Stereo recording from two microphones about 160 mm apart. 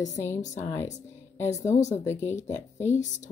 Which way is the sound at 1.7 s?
45° left (ahead or behind).